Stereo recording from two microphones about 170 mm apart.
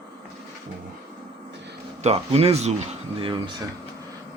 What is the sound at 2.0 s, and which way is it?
Speech, 35° right (ahead or behind).